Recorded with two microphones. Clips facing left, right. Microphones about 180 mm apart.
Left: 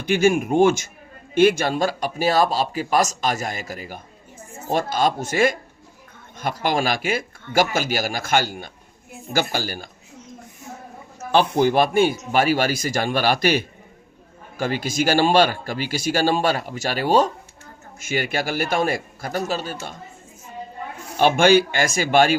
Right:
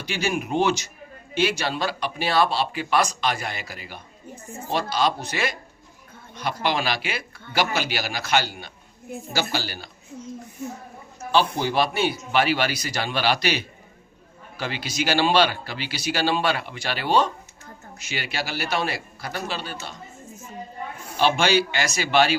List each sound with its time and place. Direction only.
0.0 s speech: 50° left (ahead or behind)
11.3 s speech: 55° left (ahead or behind)
21.2 s speech: 50° left (ahead or behind)